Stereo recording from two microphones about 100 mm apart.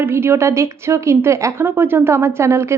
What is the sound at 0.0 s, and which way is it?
A woman's voice, 25° right (ahead or behind).